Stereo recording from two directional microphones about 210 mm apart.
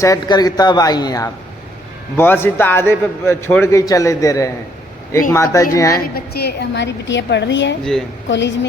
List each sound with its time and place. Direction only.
0.0 s a man's voice: 15° left (ahead or behind)
6.1 s a woman's voice: 50° left (ahead or behind)